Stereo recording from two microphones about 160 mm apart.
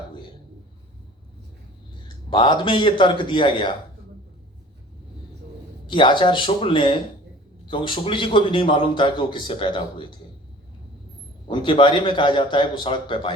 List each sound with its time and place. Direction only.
2.3 s a man's voice: 30° left (ahead or behind)
5.8 s a man's voice: 30° left (ahead or behind)
11.4 s a man's voice: 30° left (ahead or behind)